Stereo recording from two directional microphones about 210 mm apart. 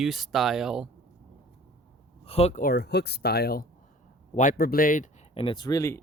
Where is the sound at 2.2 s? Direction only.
30° left (ahead or behind).